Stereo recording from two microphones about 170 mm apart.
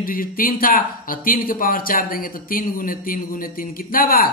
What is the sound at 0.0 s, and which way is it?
Speech, 55° left (ahead or behind).